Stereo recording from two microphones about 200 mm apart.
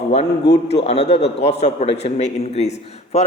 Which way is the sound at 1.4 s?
30° left (ahead or behind).